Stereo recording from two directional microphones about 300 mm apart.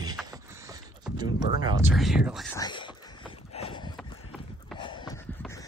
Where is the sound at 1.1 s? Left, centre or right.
Centre.